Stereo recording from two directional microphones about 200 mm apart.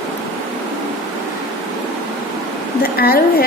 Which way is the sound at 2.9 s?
50° left (ahead or behind).